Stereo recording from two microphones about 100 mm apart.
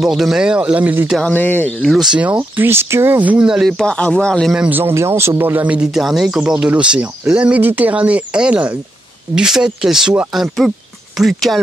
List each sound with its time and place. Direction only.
0.0 s speech: 5° right (ahead or behind)
1.2 s speech: 15° left (ahead or behind)
2.1 s speech: 15° right (ahead or behind); by 4.6 s 5° left (ahead or behind)
4.6 s speech: 20° right (ahead or behind); by 11.6 s centre (ahead or behind)